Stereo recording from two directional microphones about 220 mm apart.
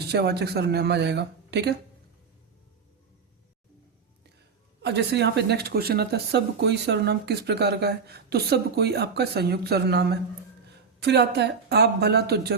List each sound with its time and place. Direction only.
0.1 s speech: 50° right (ahead or behind)
4.8 s speech: 50° right (ahead or behind)